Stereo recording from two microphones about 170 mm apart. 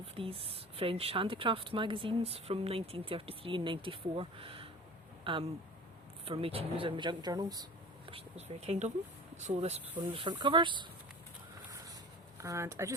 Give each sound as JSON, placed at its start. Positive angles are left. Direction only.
{"t": 0.0, "sound": "speech", "side_deg": -35}
{"t": 8.1, "sound": "speech", "side_deg": -40}
{"t": 12.4, "sound": "speech", "side_deg": -15}